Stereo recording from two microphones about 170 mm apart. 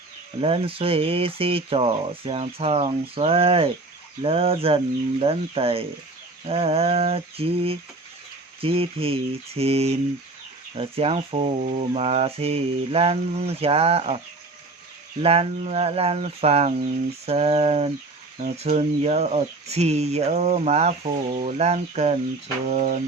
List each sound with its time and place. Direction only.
0.4 s speech: 35° right (ahead or behind)
15.2 s speech: 35° right (ahead or behind)
22.7 s a sound: 45° right (ahead or behind)